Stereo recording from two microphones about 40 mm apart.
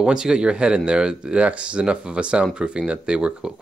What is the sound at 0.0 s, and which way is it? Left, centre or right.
Speech, centre.